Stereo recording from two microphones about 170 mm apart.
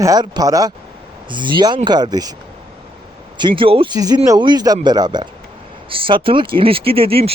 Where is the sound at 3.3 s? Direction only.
30° right (ahead or behind).